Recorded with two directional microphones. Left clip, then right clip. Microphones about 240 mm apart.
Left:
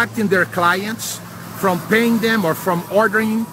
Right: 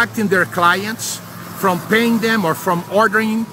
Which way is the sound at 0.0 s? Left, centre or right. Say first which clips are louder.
Right 1 dB; centre.